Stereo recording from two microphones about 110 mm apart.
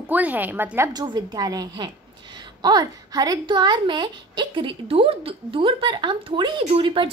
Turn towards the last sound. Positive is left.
turn(degrees=-55)  # may be behind; listen again after turning